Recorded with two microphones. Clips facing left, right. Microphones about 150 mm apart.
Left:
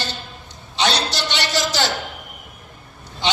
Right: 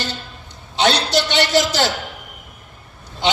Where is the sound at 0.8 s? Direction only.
50° right (ahead or behind).